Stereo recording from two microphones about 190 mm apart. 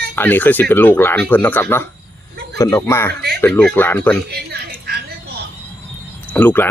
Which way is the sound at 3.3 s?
5° left (ahead or behind).